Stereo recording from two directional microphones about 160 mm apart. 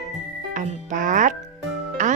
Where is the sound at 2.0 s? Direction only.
50° right (ahead or behind).